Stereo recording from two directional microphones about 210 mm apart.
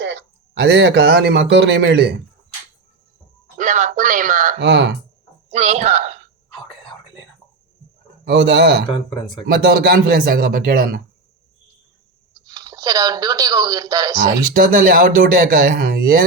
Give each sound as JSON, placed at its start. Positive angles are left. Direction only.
{"t": 0.0, "sound": "a man's voice", "side_deg": -55}
{"t": 3.6, "sound": "speech", "side_deg": -35}
{"t": 4.6, "sound": "speech", "side_deg": -55}
{"t": 5.5, "sound": "a woman's voice", "side_deg": -30}
{"t": 8.2, "sound": "speech", "side_deg": -55}
{"t": 8.9, "sound": "speech", "side_deg": 20}
{"t": 9.5, "sound": "speech", "side_deg": -45}
{"t": 12.5, "sound": "speech", "side_deg": -20}
{"t": 14.2, "sound": "speech", "side_deg": -45}